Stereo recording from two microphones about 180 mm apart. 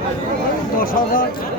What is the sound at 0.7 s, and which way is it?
Speech, 50° left (ahead or behind).